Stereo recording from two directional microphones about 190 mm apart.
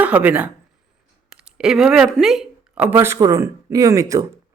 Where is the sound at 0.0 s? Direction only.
10° right (ahead or behind).